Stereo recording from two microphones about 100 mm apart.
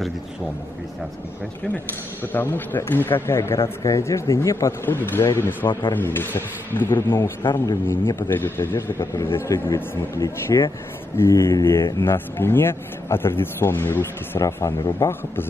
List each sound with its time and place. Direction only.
2.3 s speech: 20° left (ahead or behind)
5.7 s speech: 50° left (ahead or behind)
5.9 s speech: 20° left (ahead or behind)
14.4 s a man's voice: 35° left (ahead or behind)